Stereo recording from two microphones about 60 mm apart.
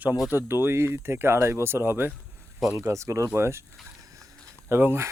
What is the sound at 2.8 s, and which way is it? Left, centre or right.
Speech, right.